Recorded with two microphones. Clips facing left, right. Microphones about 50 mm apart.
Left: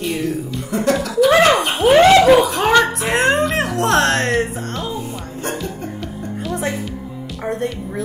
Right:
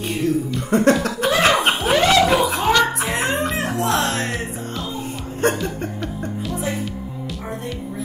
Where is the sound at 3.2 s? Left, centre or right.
Left.